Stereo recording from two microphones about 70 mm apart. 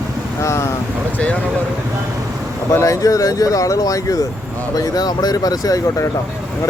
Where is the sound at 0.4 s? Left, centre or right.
Left.